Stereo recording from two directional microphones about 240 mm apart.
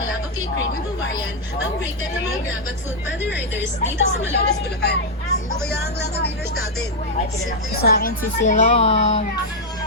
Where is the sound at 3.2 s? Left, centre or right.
Left.